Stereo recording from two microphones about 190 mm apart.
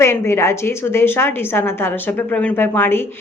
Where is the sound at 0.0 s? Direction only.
15° left (ahead or behind).